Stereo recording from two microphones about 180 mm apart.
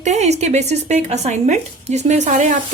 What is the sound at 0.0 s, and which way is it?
A woman's voice, 40° right (ahead or behind).